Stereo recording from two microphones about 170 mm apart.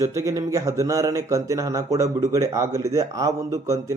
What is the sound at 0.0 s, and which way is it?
Speech, 15° right (ahead or behind).